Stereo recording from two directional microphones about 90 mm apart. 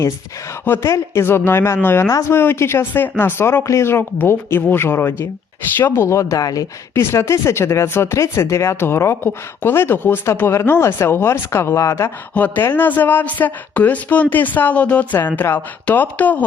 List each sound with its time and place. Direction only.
0.6 s speech: 25° left (ahead or behind); by 6.7 s 40° left (ahead or behind)
6.9 s speech: 30° left (ahead or behind)
12.3 s speech: 20° left (ahead or behind)